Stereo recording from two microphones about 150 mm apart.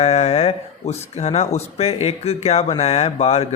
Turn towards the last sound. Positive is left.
turn(degrees=45)  # may be behind; listen again after turning